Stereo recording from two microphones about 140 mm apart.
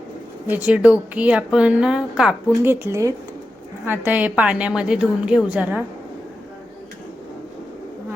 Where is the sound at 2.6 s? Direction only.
15° right (ahead or behind).